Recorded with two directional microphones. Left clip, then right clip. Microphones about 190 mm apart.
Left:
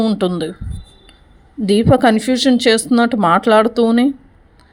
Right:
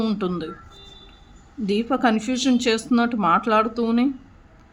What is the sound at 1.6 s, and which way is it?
Speech, 35° left (ahead or behind).